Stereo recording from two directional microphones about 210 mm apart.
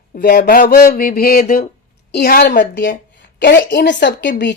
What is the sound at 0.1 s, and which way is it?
A woman's voice, 45° left (ahead or behind).